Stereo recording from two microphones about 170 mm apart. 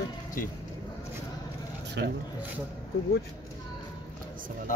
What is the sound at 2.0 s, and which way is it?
Speech, 90° right.